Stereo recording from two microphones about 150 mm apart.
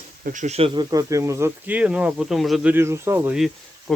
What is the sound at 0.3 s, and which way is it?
Speech, 55° right (ahead or behind).